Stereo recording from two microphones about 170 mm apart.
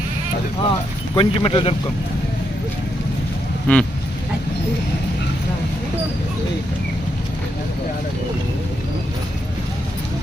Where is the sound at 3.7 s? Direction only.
10° left (ahead or behind).